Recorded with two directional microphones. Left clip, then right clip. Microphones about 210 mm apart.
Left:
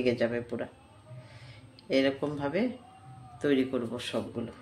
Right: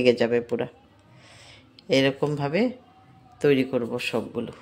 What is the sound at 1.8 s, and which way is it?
A man's voice, 45° right (ahead or behind).